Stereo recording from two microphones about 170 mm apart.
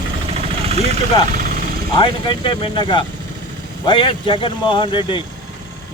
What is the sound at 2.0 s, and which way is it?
Speech, 30° left (ahead or behind).